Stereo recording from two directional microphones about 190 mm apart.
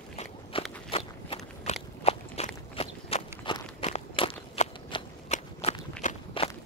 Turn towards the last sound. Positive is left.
turn(degrees=35)  # may be behind; listen again after turning